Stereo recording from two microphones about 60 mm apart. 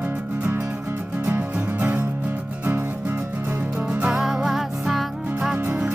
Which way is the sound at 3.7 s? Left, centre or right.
Centre.